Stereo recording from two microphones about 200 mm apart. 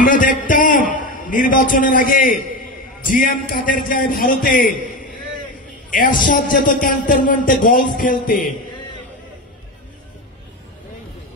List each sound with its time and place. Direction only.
0.0 s a sound: 40° left (ahead or behind)
0.5 s a man's voice: 40° left (ahead or behind)
5.9 s a man's voice: 40° left (ahead or behind)